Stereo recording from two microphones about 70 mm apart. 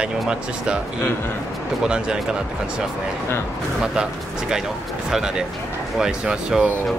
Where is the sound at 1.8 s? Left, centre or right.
Centre.